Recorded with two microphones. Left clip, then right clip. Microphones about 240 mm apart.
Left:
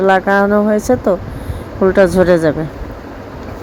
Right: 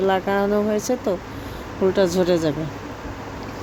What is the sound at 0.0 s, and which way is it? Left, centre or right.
Speech, centre.